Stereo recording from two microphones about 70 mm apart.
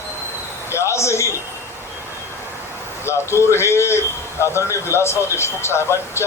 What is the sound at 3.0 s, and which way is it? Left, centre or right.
A man's voice, left.